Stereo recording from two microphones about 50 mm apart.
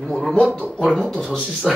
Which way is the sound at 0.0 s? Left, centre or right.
Centre.